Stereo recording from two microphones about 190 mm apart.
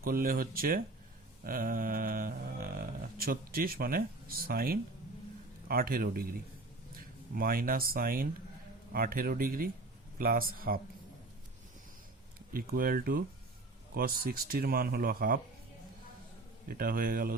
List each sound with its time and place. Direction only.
0.0 s speech: 50° right (ahead or behind)
1.5 s mantra: 50° right (ahead or behind)
3.2 s speech: 50° right (ahead or behind)
7.3 s speech: 50° right (ahead or behind)
12.5 s speech: 50° right (ahead or behind)
16.6 s speech: 50° right (ahead or behind)